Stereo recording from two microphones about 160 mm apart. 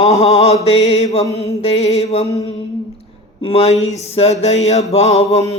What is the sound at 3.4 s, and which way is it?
Mantra, 40° left (ahead or behind).